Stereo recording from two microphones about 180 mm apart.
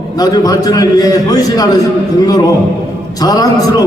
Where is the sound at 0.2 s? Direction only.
20° left (ahead or behind).